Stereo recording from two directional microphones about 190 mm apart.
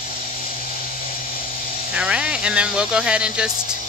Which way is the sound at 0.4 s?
50° left (ahead or behind).